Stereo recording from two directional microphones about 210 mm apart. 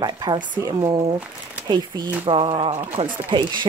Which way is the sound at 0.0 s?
20° right (ahead or behind).